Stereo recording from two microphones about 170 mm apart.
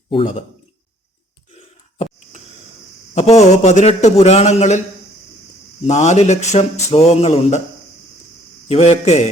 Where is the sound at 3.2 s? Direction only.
40° left (ahead or behind).